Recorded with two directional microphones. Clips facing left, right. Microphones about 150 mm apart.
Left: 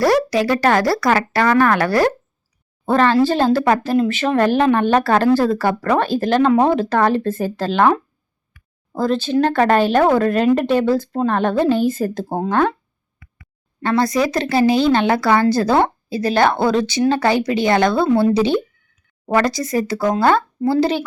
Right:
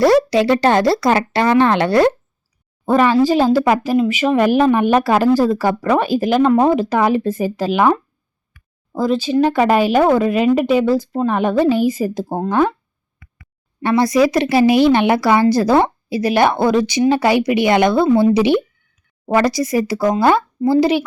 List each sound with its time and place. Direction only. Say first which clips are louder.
0.0 s speech: right 3 dB; 25° right (ahead or behind)
2.9 s a woman's voice: right 2 dB; 10° right (ahead or behind)
13.8 s a woman's voice: right 3 dB; 20° right (ahead or behind)